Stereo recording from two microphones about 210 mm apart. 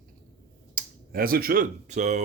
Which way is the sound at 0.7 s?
45° right (ahead or behind).